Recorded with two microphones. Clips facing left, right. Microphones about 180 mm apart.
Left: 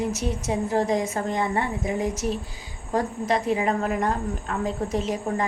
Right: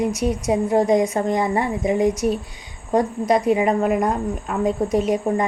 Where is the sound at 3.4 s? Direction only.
15° right (ahead or behind).